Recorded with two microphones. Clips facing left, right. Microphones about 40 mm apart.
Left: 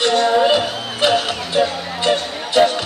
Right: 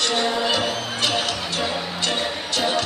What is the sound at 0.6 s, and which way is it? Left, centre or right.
Music, centre.